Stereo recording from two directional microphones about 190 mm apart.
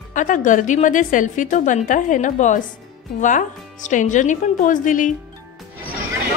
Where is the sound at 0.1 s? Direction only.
40° left (ahead or behind).